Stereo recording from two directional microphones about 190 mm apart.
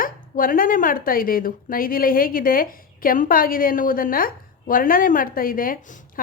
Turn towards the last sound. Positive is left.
turn(degrees=40)  # may be behind; listen again after turning